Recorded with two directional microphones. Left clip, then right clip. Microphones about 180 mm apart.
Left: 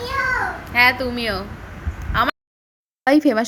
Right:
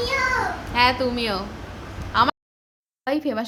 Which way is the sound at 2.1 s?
5° left (ahead or behind).